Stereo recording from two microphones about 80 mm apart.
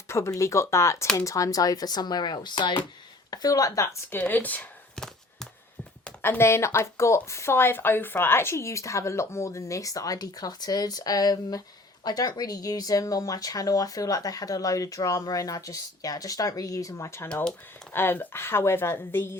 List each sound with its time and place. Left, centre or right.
0.1 s a woman's voice: left
3.2 s speech: left
4.1 s speech: left
4.9 s a sound: centre
6.2 s a woman's voice: left